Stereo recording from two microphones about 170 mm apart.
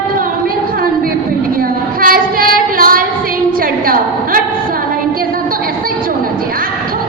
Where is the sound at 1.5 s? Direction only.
60° right (ahead or behind).